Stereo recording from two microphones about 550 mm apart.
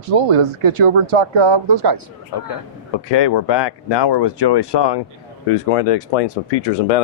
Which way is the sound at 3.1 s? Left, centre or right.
Left.